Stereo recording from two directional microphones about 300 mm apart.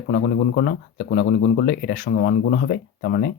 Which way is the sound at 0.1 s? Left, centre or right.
Left.